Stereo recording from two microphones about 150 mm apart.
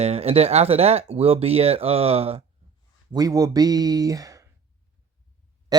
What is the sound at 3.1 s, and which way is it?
Speech, 25° right (ahead or behind).